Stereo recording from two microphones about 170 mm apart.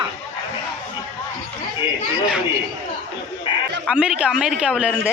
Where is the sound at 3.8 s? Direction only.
5° right (ahead or behind).